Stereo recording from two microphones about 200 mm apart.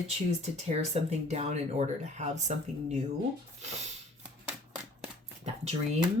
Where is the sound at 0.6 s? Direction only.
35° right (ahead or behind).